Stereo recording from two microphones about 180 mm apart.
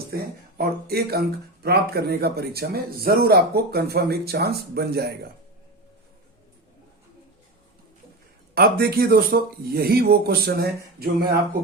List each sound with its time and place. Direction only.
0.1 s a man's voice: 60° right (ahead or behind)
8.5 s a man's voice: 60° right (ahead or behind)